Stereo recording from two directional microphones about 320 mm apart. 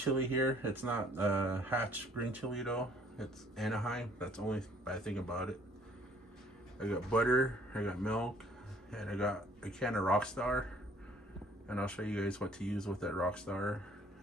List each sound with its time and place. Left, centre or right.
0.0 s speech: centre
6.8 s speech: centre
11.6 s speech: centre